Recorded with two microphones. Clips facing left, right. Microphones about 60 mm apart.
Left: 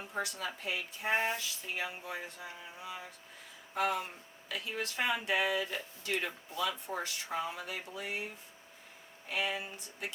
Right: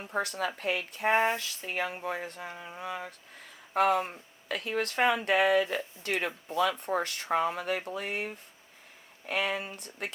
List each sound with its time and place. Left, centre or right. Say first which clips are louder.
0.1 s speech: right 7 dB; right